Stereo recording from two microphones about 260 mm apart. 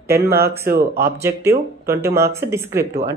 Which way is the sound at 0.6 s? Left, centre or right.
Right.